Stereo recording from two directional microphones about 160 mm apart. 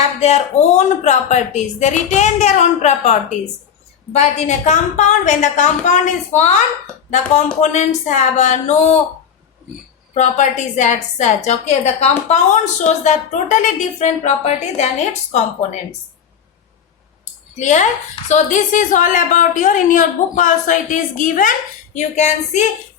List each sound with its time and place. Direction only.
0.2 s a woman's voice: 45° left (ahead or behind)
7.6 s a woman's voice: 50° left (ahead or behind)
10.2 s a woman's voice: 50° left (ahead or behind)
17.5 s a woman's voice: 50° left (ahead or behind)